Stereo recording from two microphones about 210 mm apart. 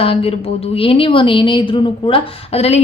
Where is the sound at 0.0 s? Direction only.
25° left (ahead or behind).